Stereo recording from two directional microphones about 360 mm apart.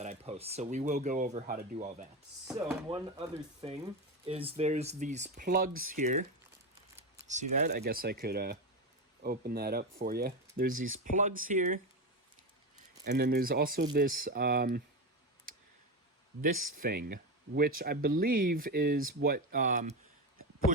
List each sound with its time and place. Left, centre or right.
0.0 s speech: centre
13.1 s speech: right
16.4 s speech: right